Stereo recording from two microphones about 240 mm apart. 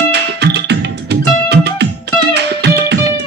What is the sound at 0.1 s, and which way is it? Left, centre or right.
Music, right.